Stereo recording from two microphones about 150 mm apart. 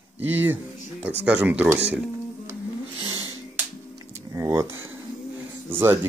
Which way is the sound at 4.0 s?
25° right (ahead or behind).